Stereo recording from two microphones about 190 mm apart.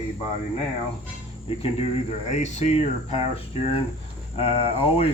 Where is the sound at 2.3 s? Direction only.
35° left (ahead or behind).